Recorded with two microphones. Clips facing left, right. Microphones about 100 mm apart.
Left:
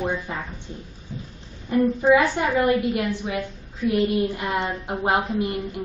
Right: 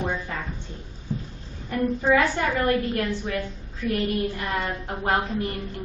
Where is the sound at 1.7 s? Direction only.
20° left (ahead or behind).